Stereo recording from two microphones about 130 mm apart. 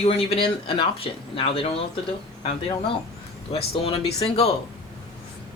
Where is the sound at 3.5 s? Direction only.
50° left (ahead or behind).